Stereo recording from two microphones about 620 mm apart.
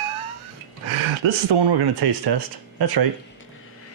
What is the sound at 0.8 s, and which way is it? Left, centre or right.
Speech, right.